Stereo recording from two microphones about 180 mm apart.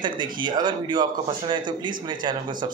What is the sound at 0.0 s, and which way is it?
Speech, 25° right (ahead or behind).